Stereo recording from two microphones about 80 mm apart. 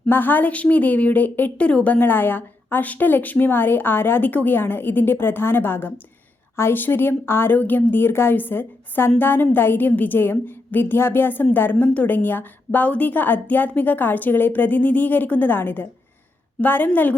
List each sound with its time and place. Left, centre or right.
0.1 s a woman's voice: left